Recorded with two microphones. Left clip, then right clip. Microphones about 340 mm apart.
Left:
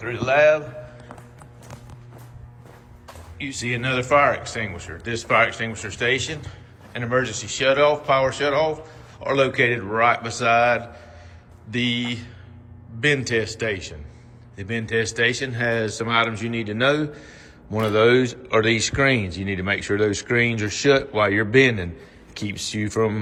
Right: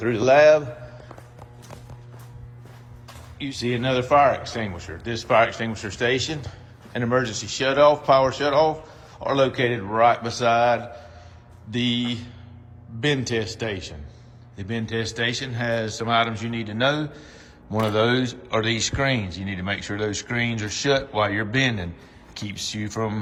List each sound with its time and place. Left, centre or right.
0.0 s speech: centre
3.3 s speech: centre